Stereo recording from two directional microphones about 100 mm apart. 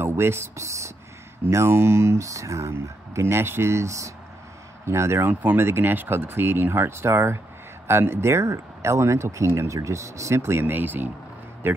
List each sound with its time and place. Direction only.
0.0 s speech: 25° right (ahead or behind)